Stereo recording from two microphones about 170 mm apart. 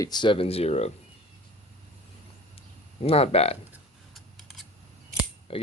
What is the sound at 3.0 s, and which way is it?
Speech, 35° left (ahead or behind).